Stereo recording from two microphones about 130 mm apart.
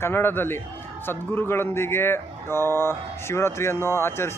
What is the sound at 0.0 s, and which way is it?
Speech, 15° left (ahead or behind).